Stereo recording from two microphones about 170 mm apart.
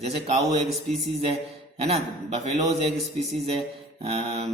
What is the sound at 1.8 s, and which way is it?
Speech, 35° right (ahead or behind).